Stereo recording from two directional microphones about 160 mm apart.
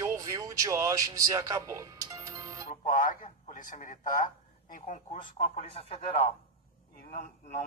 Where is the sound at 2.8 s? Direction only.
55° left (ahead or behind).